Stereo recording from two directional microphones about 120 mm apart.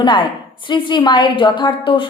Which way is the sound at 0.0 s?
40° left (ahead or behind).